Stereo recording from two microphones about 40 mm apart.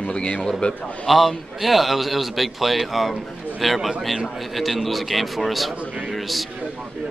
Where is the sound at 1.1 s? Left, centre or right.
Centre.